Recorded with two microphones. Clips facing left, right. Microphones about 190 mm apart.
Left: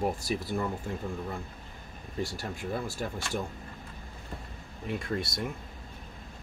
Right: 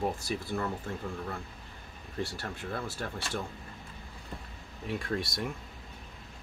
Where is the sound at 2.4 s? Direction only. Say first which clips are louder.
Left 3 dB; 15° left (ahead or behind).